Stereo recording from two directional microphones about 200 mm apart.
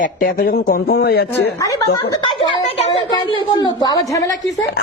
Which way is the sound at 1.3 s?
15° left (ahead or behind).